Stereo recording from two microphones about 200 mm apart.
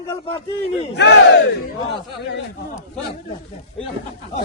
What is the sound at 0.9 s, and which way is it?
Battle cry, 60° left (ahead or behind).